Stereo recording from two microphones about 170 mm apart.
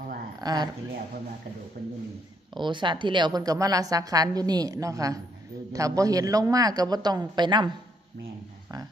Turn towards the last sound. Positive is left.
turn(degrees=-25)  # may be behind; listen again after turning